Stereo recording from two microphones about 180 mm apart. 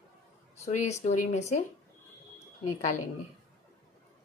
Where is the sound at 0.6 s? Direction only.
40° left (ahead or behind).